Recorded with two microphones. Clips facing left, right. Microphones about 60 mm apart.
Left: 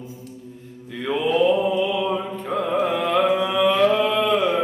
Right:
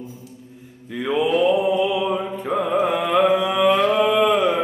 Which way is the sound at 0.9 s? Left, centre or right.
Centre.